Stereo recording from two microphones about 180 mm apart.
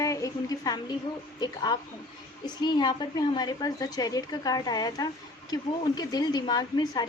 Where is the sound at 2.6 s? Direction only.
25° left (ahead or behind).